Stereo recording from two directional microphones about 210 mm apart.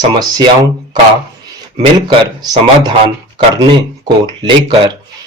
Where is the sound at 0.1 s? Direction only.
20° right (ahead or behind).